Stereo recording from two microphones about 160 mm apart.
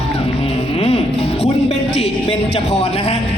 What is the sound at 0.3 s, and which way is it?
Music, 35° left (ahead or behind).